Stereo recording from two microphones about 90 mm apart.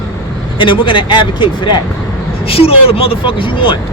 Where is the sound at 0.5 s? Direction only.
65° left (ahead or behind).